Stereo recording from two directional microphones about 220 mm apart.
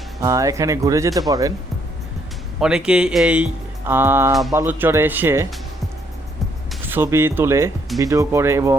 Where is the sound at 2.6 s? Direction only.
5° right (ahead or behind).